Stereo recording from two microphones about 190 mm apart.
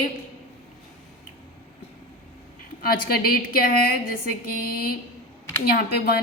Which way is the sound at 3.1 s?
50° left (ahead or behind).